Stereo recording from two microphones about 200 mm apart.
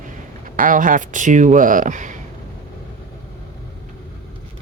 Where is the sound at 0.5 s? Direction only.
40° right (ahead or behind).